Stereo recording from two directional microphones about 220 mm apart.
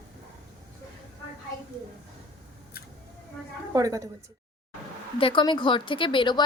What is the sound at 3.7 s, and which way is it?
Speech, 15° right (ahead or behind).